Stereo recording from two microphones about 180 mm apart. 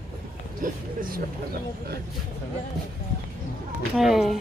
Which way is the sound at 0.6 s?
50° right (ahead or behind).